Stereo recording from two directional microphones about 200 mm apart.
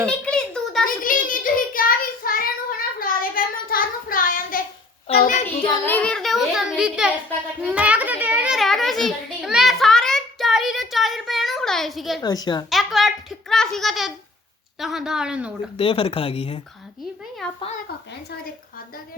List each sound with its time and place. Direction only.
0.3 s a sound: 5° left (ahead or behind)
0.9 s child singing: 45° left (ahead or behind)
5.8 s a child's voice: 5° left (ahead or behind)
7.6 s children playing: 5° right (ahead or behind)
9.0 s child singing: centre (ahead or behind)
12.2 s speech: 20° left (ahead or behind)
12.7 s a sound: centre (ahead or behind)
14.8 s a woman's voice: centre (ahead or behind)
15.8 s speech: 30° left (ahead or behind)
17.4 s a woman's voice: 5° left (ahead or behind)